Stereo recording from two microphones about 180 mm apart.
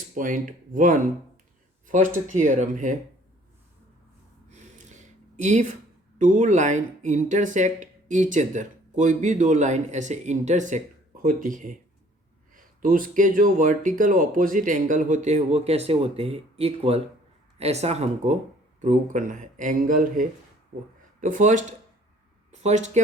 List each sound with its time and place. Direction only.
0.1 s speech: 45° right (ahead or behind)
4.5 s gasp: 40° right (ahead or behind)
5.4 s speech: 40° right (ahead or behind)